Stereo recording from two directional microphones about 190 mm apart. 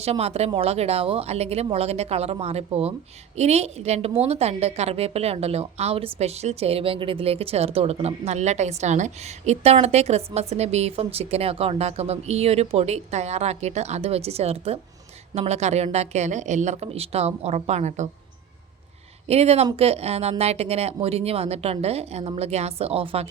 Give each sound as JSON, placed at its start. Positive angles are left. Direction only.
{"t": 0.0, "sound": "a woman's voice", "side_deg": -35}
{"t": 19.3, "sound": "a woman's voice", "side_deg": -35}